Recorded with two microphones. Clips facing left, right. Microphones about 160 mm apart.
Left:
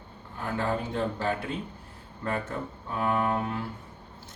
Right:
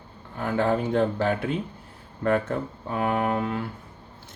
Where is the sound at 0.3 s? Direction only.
65° right (ahead or behind).